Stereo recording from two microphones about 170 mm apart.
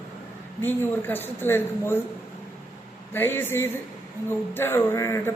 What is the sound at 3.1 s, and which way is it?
Speech, 10° left (ahead or behind).